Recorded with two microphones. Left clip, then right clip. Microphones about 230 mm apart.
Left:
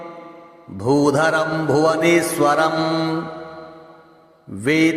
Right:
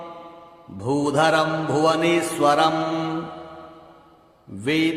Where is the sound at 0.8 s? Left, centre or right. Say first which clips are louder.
Left 4 dB; left.